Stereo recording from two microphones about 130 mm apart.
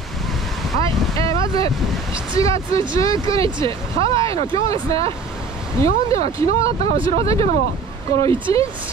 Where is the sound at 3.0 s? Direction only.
25° left (ahead or behind).